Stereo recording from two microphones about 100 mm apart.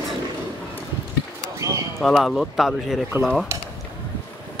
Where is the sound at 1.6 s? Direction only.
30° right (ahead or behind).